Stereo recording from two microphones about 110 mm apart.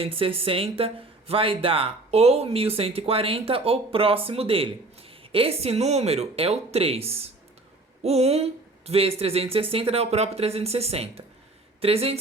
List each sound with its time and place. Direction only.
0.0 s speech: 55° right (ahead or behind)